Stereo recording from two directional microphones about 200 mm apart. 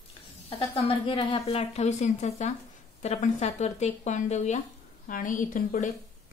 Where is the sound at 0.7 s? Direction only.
25° left (ahead or behind).